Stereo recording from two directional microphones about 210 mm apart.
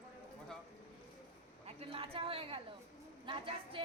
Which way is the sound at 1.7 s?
25° right (ahead or behind).